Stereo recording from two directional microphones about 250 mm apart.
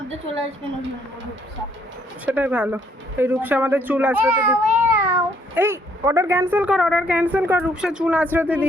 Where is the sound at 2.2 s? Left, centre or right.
Centre.